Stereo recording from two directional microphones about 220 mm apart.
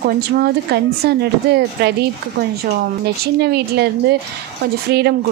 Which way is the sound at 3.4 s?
45° right (ahead or behind).